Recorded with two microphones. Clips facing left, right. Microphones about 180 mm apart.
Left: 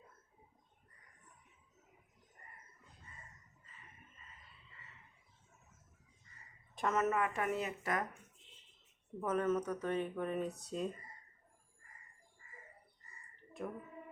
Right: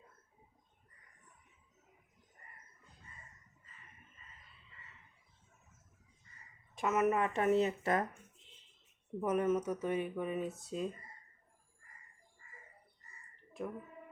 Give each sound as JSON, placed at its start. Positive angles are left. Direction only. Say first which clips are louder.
{"t": 6.7, "sound": "speech", "louder": "right 3 dB", "side_deg": -5}
{"t": 7.1, "sound": "speech", "louder": "right 5 dB", "side_deg": -25}
{"t": 9.2, "sound": "speech", "louder": "right 2 dB", "side_deg": -10}
{"t": 13.6, "sound": "speech", "louder": "right 2 dB", "side_deg": 0}